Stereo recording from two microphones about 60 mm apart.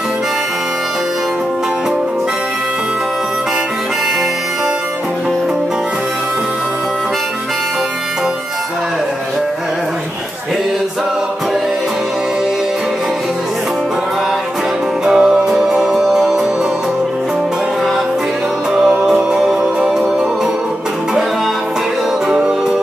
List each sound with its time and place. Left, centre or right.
15.0 s music: centre
18.7 s music: centre